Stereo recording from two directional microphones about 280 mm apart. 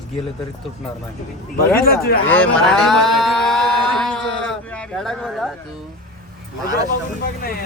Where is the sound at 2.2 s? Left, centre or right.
Centre.